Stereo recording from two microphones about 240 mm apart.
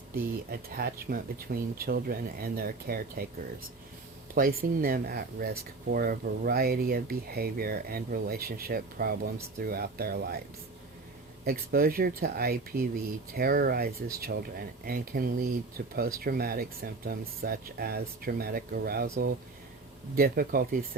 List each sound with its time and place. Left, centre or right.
0.1 s speech: right
4.4 s speech: right
11.4 s speech: right